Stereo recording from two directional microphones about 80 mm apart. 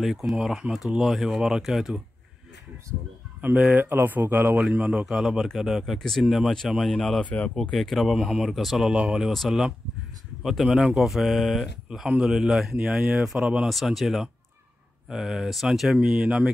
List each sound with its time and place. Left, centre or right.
0.4 s speech: centre
3.7 s speech: right
5.0 s speech: centre
7.2 s speech: centre
7.7 s speech: centre
13.7 s speech: centre
16.0 s speech: centre